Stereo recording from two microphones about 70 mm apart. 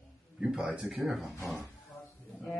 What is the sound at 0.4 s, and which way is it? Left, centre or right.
Speech, centre.